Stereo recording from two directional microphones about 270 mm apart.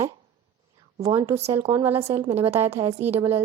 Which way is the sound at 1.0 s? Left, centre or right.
Centre.